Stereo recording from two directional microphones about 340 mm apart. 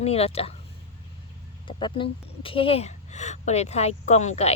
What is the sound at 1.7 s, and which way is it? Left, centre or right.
A woman's voice, centre.